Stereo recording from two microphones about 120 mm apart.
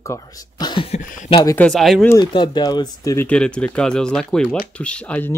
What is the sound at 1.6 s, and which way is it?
Speech, 5° left (ahead or behind).